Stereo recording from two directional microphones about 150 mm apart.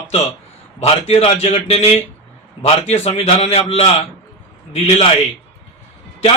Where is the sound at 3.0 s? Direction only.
45° left (ahead or behind).